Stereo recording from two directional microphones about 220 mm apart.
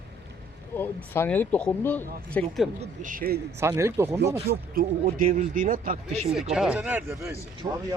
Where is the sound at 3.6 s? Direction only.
10° right (ahead or behind).